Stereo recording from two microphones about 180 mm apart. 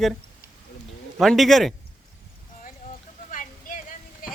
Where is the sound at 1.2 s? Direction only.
Centre (ahead or behind).